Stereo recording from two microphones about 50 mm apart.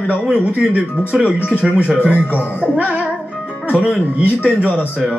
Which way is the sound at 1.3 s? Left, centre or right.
Left.